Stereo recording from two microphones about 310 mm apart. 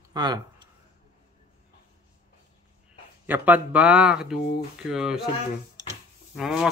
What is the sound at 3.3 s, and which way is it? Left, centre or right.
Speech, centre.